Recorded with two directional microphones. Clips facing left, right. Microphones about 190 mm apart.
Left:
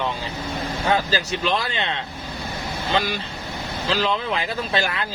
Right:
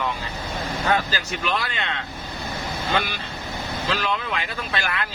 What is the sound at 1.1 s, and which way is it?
Speech, 30° left (ahead or behind).